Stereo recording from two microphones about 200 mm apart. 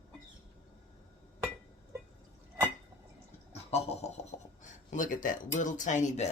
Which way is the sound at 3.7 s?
30° left (ahead or behind).